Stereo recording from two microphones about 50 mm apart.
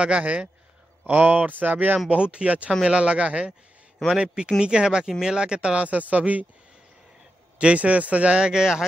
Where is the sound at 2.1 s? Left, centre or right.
Right.